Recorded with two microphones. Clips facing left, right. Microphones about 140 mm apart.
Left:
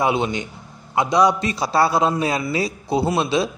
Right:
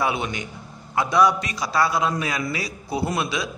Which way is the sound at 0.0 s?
25° left (ahead or behind).